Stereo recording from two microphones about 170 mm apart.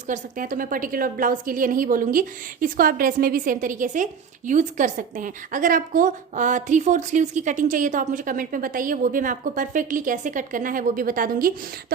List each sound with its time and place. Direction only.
0.1 s a woman's voice: 50° right (ahead or behind)